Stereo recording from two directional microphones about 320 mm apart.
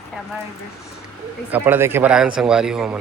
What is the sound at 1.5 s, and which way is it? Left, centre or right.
Speech, centre.